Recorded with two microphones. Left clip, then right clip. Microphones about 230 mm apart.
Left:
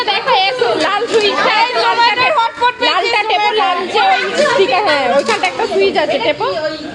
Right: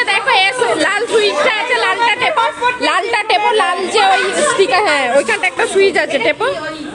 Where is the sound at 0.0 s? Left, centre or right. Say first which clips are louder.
Right 1 dB; centre.